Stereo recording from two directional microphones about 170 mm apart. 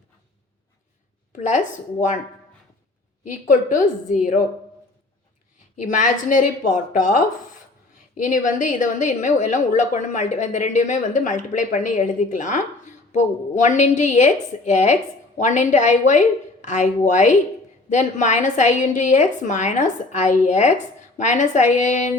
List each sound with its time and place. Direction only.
1.4 s a woman's voice: 45° left (ahead or behind)
3.2 s a woman's voice: 50° left (ahead or behind)
5.7 s a woman's voice: 50° left (ahead or behind)